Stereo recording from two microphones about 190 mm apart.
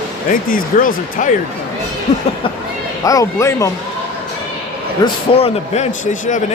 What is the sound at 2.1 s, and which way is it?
Speech, 35° left (ahead or behind).